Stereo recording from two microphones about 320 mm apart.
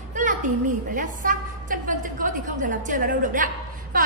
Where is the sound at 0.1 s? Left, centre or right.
Right.